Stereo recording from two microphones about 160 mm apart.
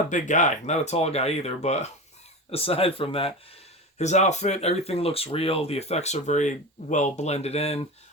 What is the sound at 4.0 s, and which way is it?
Speech, 45° left (ahead or behind).